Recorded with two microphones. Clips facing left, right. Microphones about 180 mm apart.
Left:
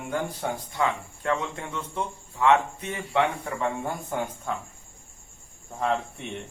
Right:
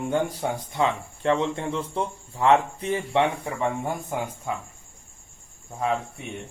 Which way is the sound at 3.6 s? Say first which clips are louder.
Right 2 dB; 10° right (ahead or behind).